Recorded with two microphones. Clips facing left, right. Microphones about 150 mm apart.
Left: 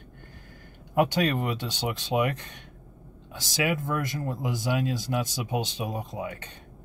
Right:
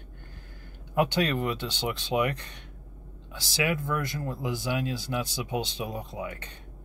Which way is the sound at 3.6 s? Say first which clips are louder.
Left 1 dB; 20° left (ahead or behind).